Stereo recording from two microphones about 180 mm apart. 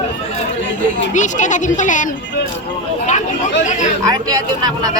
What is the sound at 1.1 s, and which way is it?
Speech, 45° left (ahead or behind).